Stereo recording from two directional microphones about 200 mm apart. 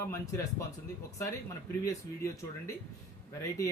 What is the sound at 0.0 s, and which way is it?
Speech, 15° left (ahead or behind).